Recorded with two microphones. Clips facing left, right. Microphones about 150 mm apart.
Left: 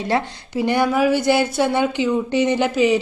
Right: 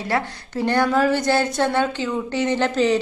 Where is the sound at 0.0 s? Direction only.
20° left (ahead or behind).